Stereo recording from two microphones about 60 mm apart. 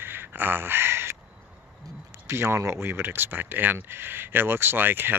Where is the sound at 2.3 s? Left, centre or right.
Right.